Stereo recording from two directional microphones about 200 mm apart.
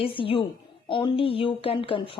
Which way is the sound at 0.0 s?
25° left (ahead or behind).